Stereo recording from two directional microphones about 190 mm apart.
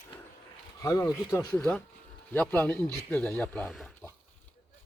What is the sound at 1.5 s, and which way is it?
Speech, 5° left (ahead or behind).